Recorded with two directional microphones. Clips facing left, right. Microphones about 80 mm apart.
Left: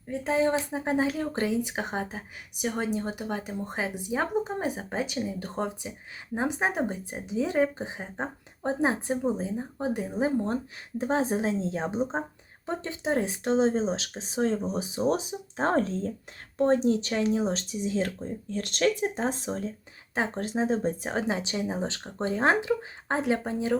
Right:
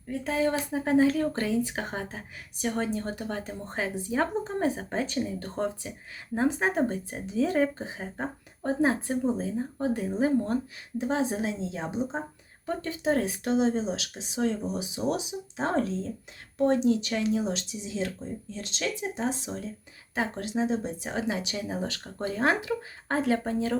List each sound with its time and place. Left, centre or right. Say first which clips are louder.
0.1 s speech: left 2 dB; left
10.9 s speech: left 1 dB; left
12.6 s speech: right 2 dB; left